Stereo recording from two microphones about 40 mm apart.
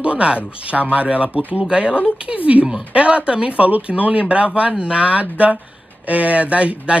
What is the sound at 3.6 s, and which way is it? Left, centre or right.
Speech, right.